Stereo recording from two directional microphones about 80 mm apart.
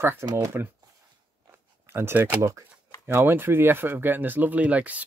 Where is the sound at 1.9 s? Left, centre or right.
Right.